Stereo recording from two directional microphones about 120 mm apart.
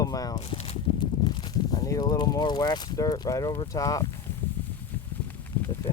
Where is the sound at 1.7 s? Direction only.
30° left (ahead or behind).